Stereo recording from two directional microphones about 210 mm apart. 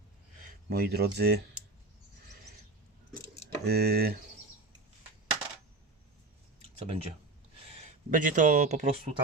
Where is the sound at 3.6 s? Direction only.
50° right (ahead or behind).